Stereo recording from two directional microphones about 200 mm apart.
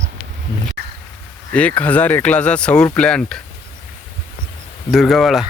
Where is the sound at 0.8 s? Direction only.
55° right (ahead or behind).